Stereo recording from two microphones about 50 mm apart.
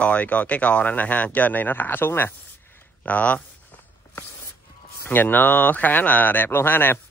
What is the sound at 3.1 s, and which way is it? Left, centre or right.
Speech, left.